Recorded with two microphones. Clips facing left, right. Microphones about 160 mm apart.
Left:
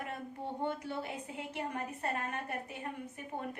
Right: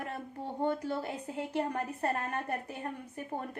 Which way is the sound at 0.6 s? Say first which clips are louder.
Right 6 dB; 40° right (ahead or behind).